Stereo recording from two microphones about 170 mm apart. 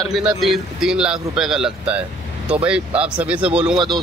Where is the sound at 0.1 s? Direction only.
Centre (ahead or behind).